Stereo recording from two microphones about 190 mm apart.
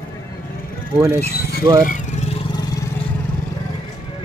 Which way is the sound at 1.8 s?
40° left (ahead or behind).